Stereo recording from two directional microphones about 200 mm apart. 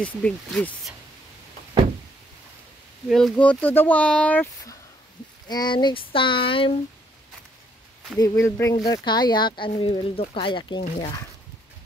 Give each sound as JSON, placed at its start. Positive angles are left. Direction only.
{"t": 0.0, "sound": "speech", "side_deg": 5}
{"t": 3.1, "sound": "speech", "side_deg": 0}
{"t": 5.5, "sound": "speech", "side_deg": 20}
{"t": 8.2, "sound": "speech", "side_deg": 15}